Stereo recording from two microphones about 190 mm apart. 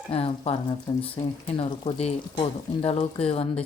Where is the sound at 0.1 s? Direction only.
30° left (ahead or behind).